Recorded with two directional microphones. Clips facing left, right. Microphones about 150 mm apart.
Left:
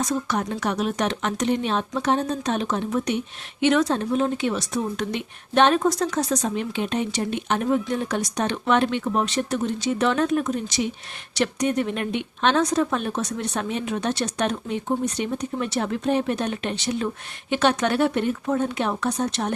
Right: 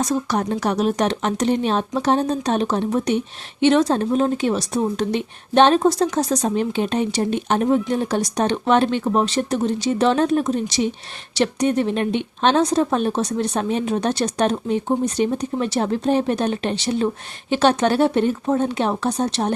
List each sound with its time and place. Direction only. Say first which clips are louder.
0.0 s speech: right 4 dB; 35° right (ahead or behind)